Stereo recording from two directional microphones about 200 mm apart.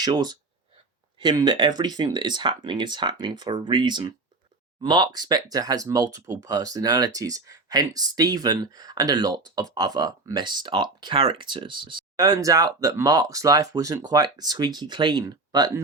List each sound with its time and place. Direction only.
0.0 s speech: 20° right (ahead or behind)